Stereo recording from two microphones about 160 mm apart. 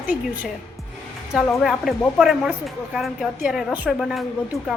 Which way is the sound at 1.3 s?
Centre (ahead or behind).